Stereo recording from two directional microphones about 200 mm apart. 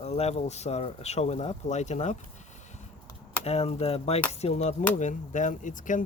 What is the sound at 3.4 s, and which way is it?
Speech, 30° left (ahead or behind).